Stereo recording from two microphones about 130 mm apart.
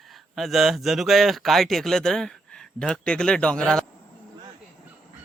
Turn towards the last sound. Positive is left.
turn(degrees=5)  # may be behind; listen again after turning